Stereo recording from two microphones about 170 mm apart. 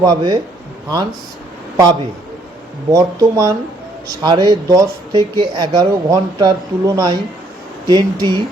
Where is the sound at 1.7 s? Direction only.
20° right (ahead or behind).